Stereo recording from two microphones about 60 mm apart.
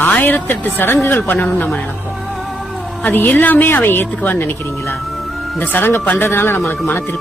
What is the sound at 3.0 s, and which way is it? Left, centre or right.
Speech, left.